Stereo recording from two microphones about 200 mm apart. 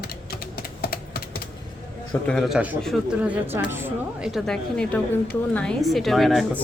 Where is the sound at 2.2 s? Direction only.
Centre (ahead or behind).